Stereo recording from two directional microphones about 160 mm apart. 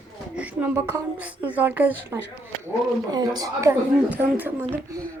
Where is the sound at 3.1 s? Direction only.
25° right (ahead or behind).